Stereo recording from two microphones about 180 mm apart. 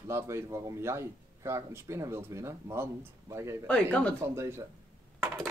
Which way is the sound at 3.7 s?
10° left (ahead or behind).